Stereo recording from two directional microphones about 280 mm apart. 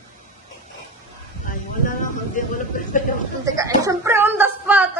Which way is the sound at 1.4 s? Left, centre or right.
Left.